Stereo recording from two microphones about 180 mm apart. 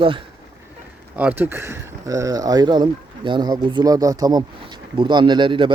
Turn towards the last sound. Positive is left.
turn(degrees=-25)  # may be behind; listen again after turning